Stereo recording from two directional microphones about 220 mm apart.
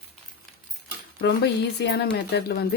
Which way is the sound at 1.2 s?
50° left (ahead or behind).